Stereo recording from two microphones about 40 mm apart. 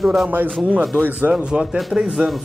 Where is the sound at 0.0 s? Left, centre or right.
Centre.